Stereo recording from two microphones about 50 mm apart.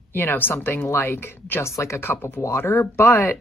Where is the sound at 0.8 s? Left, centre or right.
Left.